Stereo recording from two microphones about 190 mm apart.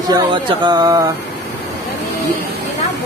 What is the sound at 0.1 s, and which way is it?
Speech, 25° right (ahead or behind).